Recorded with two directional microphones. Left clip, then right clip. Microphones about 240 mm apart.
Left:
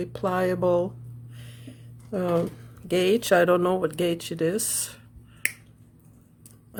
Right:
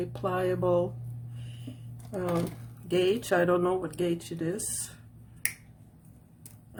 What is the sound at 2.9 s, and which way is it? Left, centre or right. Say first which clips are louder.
Speech: left 5 dB; left.